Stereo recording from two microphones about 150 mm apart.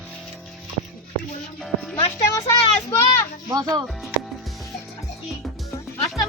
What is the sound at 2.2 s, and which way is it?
Speech, 20° left (ahead or behind).